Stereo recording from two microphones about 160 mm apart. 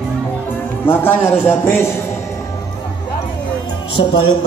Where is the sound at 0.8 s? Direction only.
15° left (ahead or behind).